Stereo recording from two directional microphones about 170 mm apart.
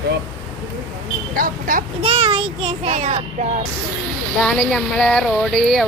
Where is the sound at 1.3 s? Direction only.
55° right (ahead or behind).